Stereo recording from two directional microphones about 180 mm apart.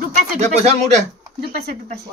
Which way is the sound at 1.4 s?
60° right (ahead or behind).